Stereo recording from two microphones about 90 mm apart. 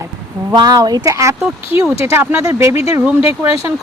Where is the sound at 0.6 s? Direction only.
45° right (ahead or behind).